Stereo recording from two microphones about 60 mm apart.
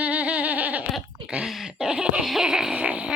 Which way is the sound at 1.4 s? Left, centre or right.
Centre.